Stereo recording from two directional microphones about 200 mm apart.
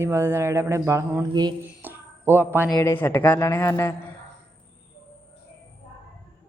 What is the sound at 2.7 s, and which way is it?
Speech, 10° left (ahead or behind).